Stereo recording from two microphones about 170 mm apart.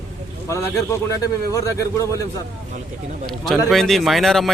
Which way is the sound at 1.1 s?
20° left (ahead or behind).